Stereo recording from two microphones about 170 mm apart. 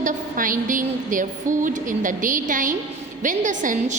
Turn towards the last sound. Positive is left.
turn(degrees=-45)  # may be behind; listen again after turning